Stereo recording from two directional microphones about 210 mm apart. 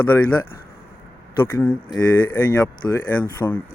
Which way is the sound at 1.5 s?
10° left (ahead or behind).